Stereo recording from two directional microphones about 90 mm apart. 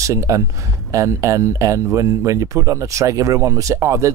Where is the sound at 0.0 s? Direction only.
35° right (ahead or behind).